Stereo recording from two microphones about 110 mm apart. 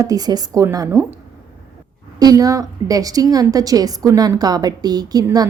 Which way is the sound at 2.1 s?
35° right (ahead or behind).